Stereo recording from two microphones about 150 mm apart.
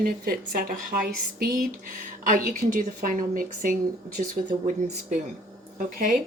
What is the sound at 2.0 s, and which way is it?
A woman's voice, 65° right (ahead or behind).